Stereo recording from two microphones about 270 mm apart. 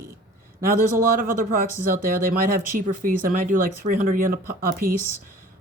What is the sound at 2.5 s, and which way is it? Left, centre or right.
Speech, right.